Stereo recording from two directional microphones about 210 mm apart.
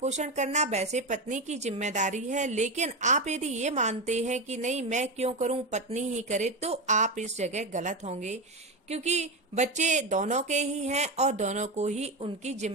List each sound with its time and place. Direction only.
0.0 s speech: 35° right (ahead or behind)